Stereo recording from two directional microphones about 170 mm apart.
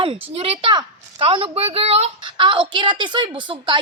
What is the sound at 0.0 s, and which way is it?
A woman's voice, 30° right (ahead or behind).